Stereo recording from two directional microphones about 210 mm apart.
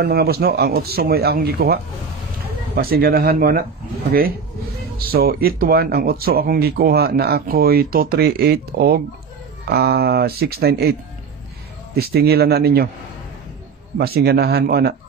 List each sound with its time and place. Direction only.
0.0 s speech: 50° right (ahead or behind)
4.9 s speech: 45° right (ahead or behind)
13.9 s speech: 45° right (ahead or behind)